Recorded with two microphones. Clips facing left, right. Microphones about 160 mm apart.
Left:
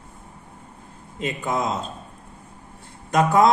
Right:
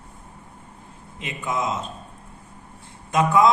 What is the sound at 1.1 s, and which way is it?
Speech, 40° left (ahead or behind).